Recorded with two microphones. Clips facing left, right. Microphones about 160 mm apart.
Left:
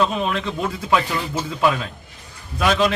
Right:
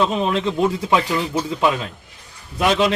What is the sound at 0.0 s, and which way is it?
Speech, 20° right (ahead or behind).